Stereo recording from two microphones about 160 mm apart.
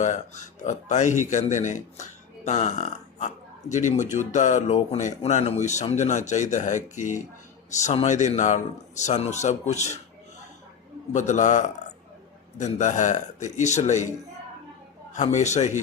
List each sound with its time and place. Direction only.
0.0 s speech: 50° left (ahead or behind)
11.1 s speech: 50° left (ahead or behind)
15.1 s speech: 45° left (ahead or behind)